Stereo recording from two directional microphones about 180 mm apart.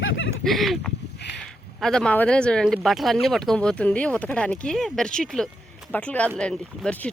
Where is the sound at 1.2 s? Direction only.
70° left (ahead or behind).